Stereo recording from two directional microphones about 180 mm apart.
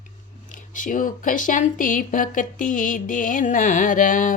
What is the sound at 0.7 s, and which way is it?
Speech, 45° left (ahead or behind).